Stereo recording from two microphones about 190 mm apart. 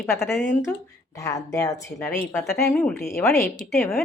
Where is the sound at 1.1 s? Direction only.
15° left (ahead or behind).